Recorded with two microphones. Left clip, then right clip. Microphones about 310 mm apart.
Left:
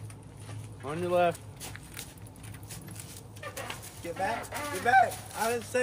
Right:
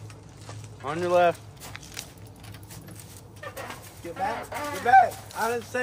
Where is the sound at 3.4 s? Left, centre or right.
Centre.